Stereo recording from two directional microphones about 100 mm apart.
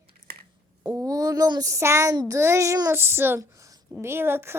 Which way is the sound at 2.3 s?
30° right (ahead or behind).